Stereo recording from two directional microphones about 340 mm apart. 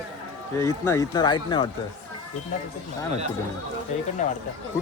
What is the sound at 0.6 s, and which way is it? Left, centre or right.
Speech, centre.